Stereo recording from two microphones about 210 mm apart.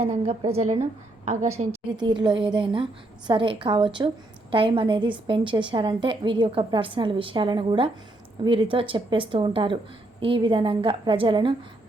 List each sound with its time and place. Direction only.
0.0 s a woman's voice: 30° right (ahead or behind)
2.0 s a woman's voice: 20° right (ahead or behind)